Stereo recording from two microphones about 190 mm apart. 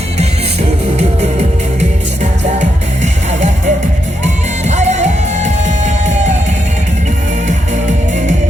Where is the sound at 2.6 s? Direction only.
40° right (ahead or behind).